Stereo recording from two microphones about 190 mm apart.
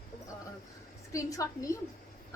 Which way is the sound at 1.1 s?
15° left (ahead or behind).